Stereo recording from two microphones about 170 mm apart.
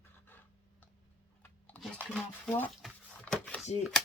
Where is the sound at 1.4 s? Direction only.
10° left (ahead or behind).